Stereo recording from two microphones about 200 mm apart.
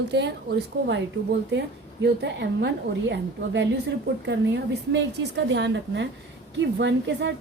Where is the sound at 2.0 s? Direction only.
60° right (ahead or behind).